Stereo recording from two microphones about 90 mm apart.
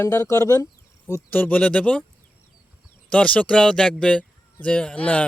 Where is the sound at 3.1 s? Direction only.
15° left (ahead or behind).